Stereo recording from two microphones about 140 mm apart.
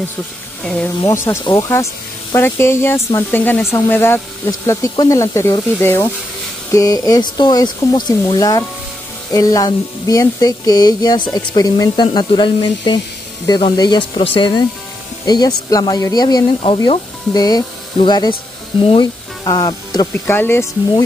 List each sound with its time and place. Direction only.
1.0 s speech: 20° left (ahead or behind)
1.4 s speech: 30° left (ahead or behind)
2.3 s speech: 15° left (ahead or behind)
20.2 s speech: 15° left (ahead or behind)